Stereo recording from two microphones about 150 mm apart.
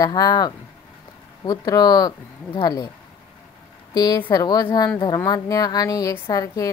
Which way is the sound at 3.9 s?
30° left (ahead or behind).